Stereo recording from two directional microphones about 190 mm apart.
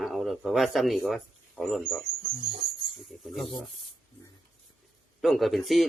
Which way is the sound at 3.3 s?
Centre (ahead or behind).